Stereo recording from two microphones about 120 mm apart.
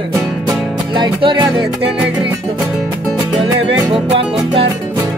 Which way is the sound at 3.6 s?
50° right (ahead or behind).